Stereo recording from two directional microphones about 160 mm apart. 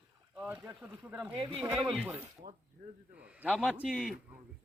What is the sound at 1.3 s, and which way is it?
Speech, 30° right (ahead or behind).